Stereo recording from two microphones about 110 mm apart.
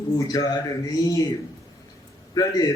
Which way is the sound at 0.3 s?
30° left (ahead or behind).